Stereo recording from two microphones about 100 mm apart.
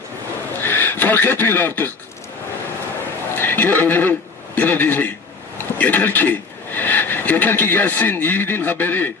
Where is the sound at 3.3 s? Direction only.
20° left (ahead or behind).